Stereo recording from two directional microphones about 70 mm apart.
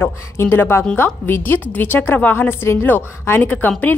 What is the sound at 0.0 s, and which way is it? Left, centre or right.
A woman's voice, left.